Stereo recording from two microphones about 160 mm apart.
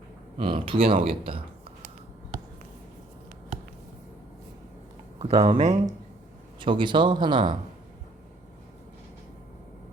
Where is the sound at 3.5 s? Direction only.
45° right (ahead or behind).